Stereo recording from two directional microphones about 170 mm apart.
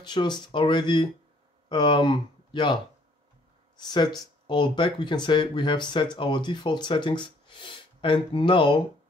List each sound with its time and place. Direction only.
0.0 s speech: 25° left (ahead or behind)